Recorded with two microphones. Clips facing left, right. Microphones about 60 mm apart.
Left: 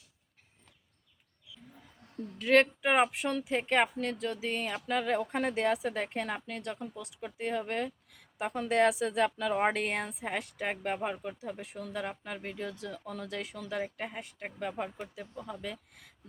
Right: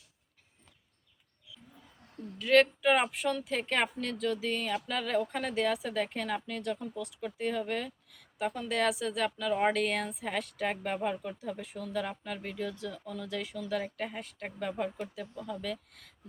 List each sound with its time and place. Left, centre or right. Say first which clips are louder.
2.4 s speech: right 1 dB; left